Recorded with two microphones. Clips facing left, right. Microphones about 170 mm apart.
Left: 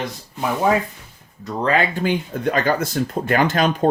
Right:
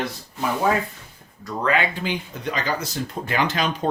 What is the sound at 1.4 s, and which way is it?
Speech, 35° left (ahead or behind).